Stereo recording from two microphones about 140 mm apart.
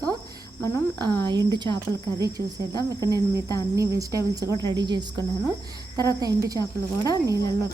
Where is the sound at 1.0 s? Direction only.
30° right (ahead or behind).